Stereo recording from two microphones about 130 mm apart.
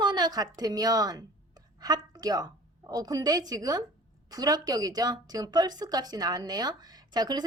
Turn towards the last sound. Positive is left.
turn(degrees=-30)  # may be behind; listen again after turning